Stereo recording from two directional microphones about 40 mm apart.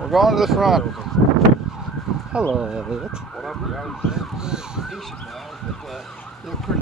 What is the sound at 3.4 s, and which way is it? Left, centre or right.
Speech, centre.